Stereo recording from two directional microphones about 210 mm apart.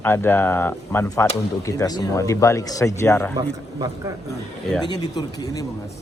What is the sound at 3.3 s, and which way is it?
Speech, 20° right (ahead or behind).